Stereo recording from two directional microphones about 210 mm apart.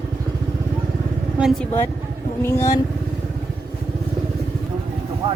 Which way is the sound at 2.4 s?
15° left (ahead or behind).